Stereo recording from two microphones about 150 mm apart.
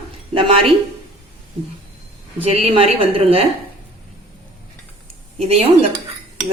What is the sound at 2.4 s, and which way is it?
Speech, 40° right (ahead or behind).